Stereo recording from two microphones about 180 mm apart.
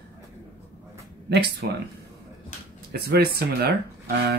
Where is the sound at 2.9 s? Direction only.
60° right (ahead or behind).